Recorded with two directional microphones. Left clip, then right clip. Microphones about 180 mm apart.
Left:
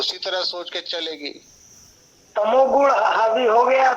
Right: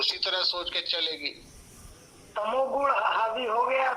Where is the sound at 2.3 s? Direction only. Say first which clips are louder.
Left 11 dB; 40° left (ahead or behind).